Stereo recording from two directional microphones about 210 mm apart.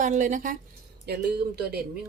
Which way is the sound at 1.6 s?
50° right (ahead or behind).